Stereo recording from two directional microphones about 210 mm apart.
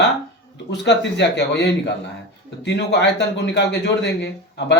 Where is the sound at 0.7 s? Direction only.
55° left (ahead or behind).